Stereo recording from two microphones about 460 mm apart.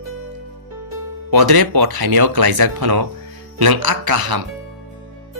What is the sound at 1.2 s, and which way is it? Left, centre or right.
Speech, right.